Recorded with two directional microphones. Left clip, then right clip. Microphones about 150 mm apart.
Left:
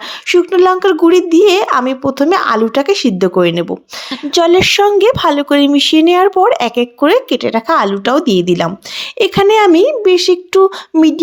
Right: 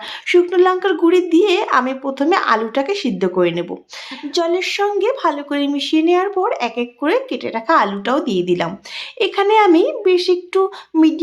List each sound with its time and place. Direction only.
0.3 s speech: 35° left (ahead or behind)
4.3 s speech: 60° left (ahead or behind)